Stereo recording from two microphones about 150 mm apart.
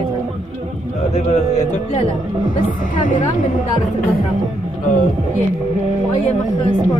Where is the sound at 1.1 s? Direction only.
50° left (ahead or behind).